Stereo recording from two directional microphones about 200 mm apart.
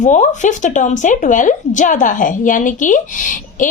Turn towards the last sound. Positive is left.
turn(degrees=40)  # may be behind; listen again after turning